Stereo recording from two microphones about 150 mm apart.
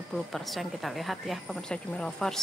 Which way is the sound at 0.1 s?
Centre (ahead or behind).